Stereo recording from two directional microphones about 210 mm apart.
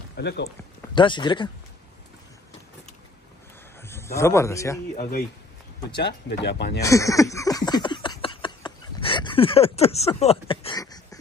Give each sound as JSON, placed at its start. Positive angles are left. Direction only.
{"t": 0.1, "sound": "speech", "side_deg": 55}
{"t": 0.9, "sound": "speech", "side_deg": 20}
{"t": 3.8, "sound": "speech", "side_deg": 10}
{"t": 5.9, "sound": "speech", "side_deg": 50}
{"t": 6.8, "sound": "a sound", "side_deg": 15}